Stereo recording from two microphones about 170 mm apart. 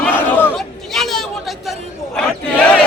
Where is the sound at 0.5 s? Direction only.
Centre (ahead or behind).